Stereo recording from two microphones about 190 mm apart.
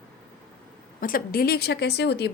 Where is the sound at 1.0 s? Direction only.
50° left (ahead or behind).